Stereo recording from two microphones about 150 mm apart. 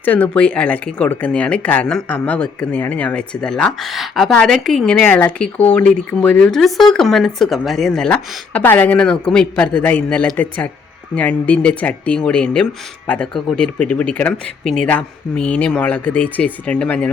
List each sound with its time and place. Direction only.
0.0 s speech: 10° left (ahead or behind)